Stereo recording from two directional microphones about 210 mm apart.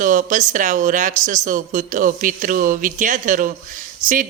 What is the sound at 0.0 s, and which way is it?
A woman's voice, 40° right (ahead or behind).